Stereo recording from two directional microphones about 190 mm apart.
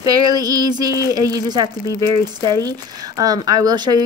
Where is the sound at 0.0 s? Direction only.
20° right (ahead or behind).